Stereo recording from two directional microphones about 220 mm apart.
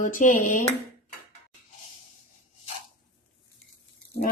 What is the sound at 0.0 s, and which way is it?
Speech, 35° left (ahead or behind).